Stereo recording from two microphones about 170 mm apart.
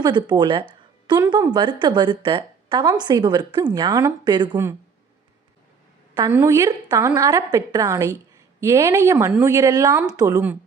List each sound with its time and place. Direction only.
0.0 s a woman's voice: 25° right (ahead or behind)
6.3 s a woman's voice: 15° right (ahead or behind)
9.9 s speech: 10° right (ahead or behind)
10.2 s a woman's voice: 20° right (ahead or behind)